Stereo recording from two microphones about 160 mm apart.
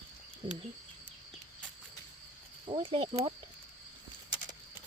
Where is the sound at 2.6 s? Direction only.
35° right (ahead or behind).